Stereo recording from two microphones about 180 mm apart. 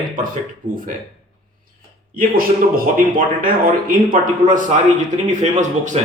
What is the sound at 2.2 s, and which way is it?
A man's voice, 50° right (ahead or behind).